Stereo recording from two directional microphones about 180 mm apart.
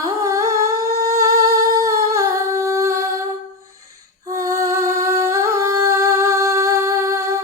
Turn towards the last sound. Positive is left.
turn(degrees=-15)  # may be behind; listen again after turning